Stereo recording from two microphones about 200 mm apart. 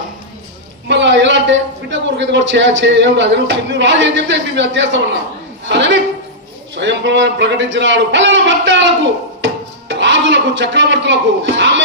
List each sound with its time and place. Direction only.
0.9 s a man's voice: 60° right (ahead or behind)
9.9 s speech: 65° right (ahead or behind)